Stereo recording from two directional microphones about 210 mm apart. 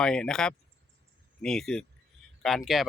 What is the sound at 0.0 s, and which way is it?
Speech, 5° left (ahead or behind).